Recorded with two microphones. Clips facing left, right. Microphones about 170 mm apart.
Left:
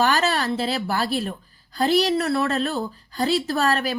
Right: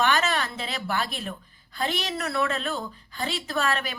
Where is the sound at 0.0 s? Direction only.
35° left (ahead or behind).